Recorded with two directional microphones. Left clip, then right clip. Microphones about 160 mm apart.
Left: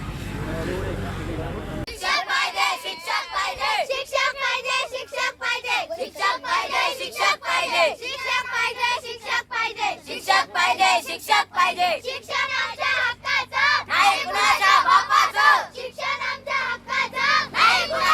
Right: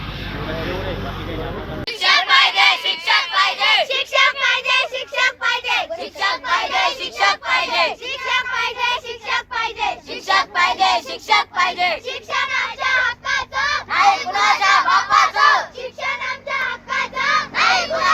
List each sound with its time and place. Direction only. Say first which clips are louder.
2.0 s child singing: right 8 dB; 10° left (ahead or behind)
2.3 s child singing: right 9 dB; 40° left (ahead or behind)
3.8 s child singing: right 7 dB; centre (ahead or behind)
6.1 s a sound: right 4 dB; 35° left (ahead or behind)
8.0 s child singing: right 4 dB; centre (ahead or behind)
10.2 s child singing: right 3 dB; 35° left (ahead or behind)
12.0 s child singing: right 3 dB; 5° right (ahead or behind)
13.5 s a sound: even; 10° left (ahead or behind)
13.9 s crowd: right 4 dB; 35° left (ahead or behind)
16.0 s child singing: right 3 dB; centre (ahead or behind)
17.5 s crowd: right 2 dB; 30° left (ahead or behind)